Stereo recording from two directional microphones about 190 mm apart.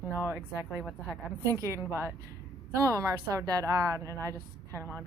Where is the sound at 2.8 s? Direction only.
15° right (ahead or behind).